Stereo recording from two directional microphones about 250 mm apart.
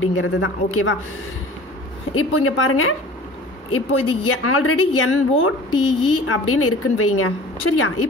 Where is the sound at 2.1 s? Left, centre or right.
Left.